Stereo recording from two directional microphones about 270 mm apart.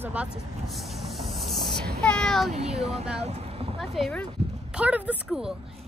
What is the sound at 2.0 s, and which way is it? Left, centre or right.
Speech, centre.